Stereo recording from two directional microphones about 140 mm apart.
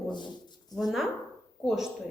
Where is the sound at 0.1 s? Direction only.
30° left (ahead or behind).